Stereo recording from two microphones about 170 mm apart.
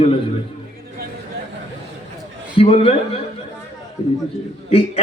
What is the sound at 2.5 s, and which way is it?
Speech, 35° left (ahead or behind).